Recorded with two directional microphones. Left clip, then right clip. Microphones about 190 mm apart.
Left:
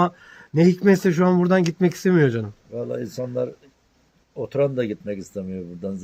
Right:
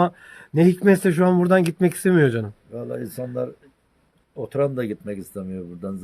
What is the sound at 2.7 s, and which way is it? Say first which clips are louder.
Speech: left 2 dB; 10° right (ahead or behind).